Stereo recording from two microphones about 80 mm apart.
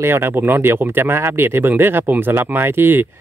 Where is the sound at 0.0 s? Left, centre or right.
Right.